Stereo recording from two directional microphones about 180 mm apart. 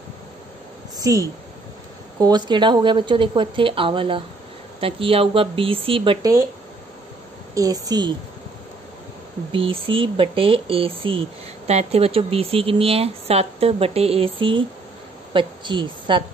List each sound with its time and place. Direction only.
0.9 s speech: 20° right (ahead or behind)
7.5 s speech: 20° right (ahead or behind)
9.5 s speech: 30° right (ahead or behind)